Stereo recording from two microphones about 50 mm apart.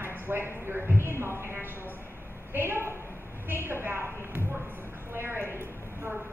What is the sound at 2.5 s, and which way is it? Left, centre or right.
A woman's voice, right.